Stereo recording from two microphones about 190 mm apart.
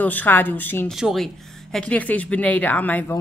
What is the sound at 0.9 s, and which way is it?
Speech, centre (ahead or behind).